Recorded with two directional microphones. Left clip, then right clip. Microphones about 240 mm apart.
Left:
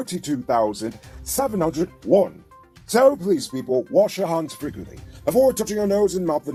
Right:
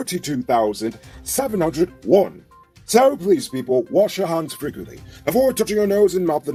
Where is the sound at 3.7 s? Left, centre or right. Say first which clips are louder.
Right 1 dB; left.